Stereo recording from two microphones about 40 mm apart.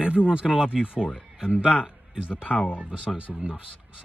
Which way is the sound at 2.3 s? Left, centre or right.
Left.